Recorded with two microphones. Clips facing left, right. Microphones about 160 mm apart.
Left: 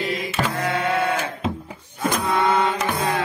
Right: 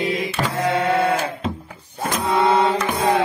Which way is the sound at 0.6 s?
30° right (ahead or behind).